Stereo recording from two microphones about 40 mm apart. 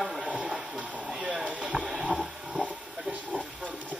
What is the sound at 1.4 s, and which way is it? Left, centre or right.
Speech, right.